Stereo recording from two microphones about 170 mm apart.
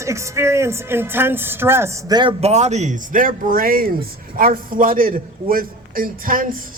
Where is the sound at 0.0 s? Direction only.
15° right (ahead or behind).